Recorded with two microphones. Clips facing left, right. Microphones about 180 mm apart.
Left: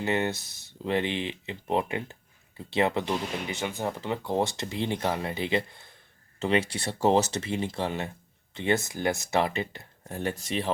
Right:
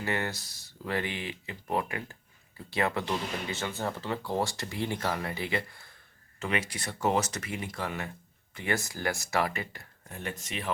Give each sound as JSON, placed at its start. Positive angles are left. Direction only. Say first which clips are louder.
{"t": 0.0, "sound": "speech", "louder": "left 5 dB", "side_deg": 20}
{"t": 10.2, "sound": "speech", "louder": "left 7 dB", "side_deg": 35}